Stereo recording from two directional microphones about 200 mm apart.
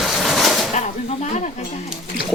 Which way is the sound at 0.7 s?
35° left (ahead or behind).